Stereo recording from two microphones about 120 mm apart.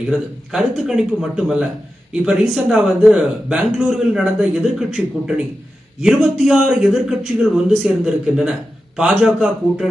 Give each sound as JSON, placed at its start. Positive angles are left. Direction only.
{"t": 0.1, "sound": "a man's voice", "side_deg": -5}